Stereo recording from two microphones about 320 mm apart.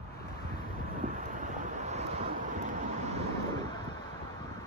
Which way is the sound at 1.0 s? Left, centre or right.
Right.